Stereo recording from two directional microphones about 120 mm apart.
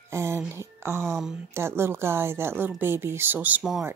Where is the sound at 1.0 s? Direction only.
Centre (ahead or behind).